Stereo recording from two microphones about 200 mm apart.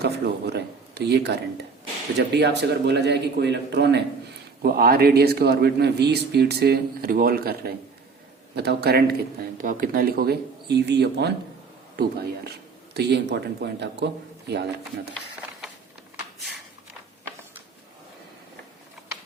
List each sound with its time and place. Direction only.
0.0 s a man's voice: 55° right (ahead or behind)
12.5 s speech: 55° right (ahead or behind)